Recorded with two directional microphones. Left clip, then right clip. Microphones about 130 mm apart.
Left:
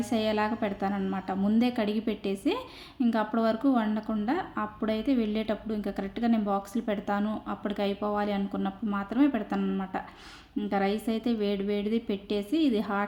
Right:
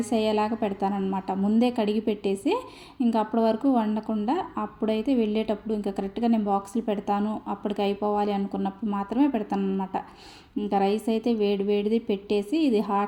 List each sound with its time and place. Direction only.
0.0 s a woman's voice: 15° right (ahead or behind)
10.7 s a woman's voice: 15° right (ahead or behind)